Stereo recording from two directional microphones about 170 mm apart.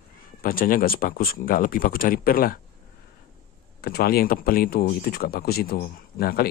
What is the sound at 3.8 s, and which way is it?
Speech, 65° left (ahead or behind).